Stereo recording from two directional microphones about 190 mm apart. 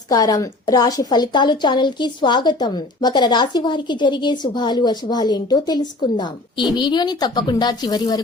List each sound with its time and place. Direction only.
0.1 s a woman's voice: 20° left (ahead or behind)